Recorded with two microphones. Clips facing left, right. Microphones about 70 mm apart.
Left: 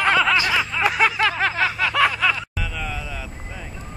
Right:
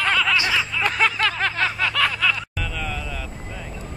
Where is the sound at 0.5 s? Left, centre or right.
Centre.